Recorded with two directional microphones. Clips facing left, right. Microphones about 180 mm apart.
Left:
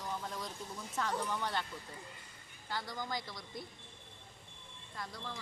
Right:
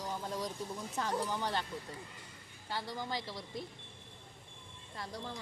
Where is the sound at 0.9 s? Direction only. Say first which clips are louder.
Right 1 dB; 20° right (ahead or behind).